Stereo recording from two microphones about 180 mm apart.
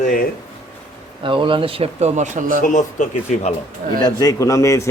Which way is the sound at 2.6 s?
45° left (ahead or behind).